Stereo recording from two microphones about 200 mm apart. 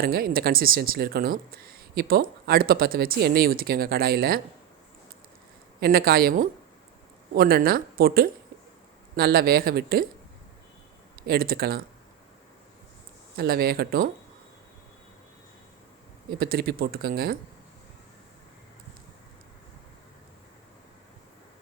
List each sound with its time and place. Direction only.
0.0 s speech: 45° right (ahead or behind)
5.8 s speech: 50° right (ahead or behind)
11.3 s speech: 50° right (ahead or behind)
13.3 s speech: 50° right (ahead or behind)
16.4 s speech: 50° right (ahead or behind)